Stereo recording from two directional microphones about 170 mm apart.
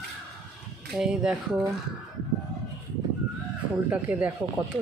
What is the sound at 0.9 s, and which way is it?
Speech, 5° right (ahead or behind).